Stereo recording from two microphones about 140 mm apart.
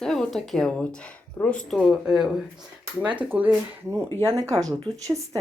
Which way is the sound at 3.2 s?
10° right (ahead or behind).